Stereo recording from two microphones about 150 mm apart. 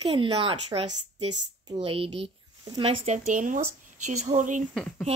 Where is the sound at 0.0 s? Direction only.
35° right (ahead or behind).